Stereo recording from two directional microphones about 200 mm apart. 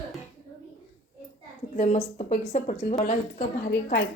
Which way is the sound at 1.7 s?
35° left (ahead or behind).